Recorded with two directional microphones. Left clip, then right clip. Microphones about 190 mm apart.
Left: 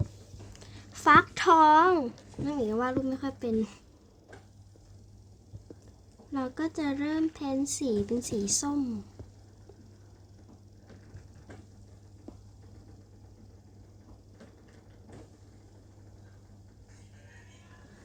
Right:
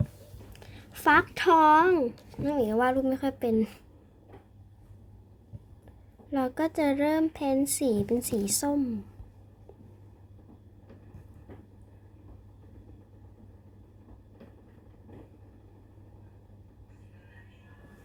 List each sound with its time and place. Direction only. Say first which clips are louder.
0.5 s a sound: right 1 dB; 10° left (ahead or behind)
2.4 s speech: right 4 dB; centre (ahead or behind)
6.3 s speech: right 5 dB; 5° right (ahead or behind)